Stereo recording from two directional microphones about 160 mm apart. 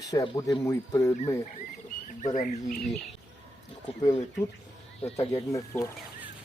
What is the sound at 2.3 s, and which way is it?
Speech, 55° left (ahead or behind).